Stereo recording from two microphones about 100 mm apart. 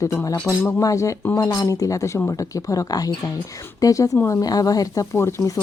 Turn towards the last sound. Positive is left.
turn(degrees=30)  # may be behind; listen again after turning